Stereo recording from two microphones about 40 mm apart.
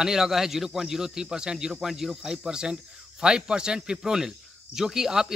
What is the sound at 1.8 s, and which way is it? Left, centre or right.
Speech, centre.